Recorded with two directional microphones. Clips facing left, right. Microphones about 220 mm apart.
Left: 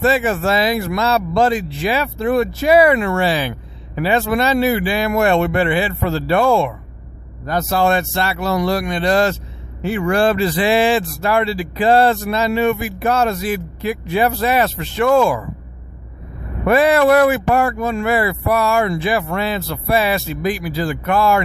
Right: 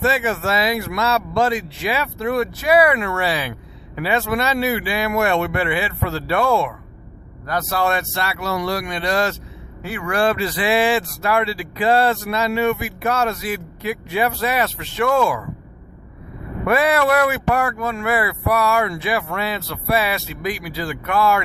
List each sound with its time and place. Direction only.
0.0 s speech: 35° left (ahead or behind)
16.6 s speech: 30° left (ahead or behind)